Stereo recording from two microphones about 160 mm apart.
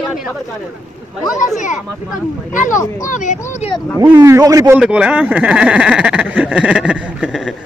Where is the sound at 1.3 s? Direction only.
50° left (ahead or behind).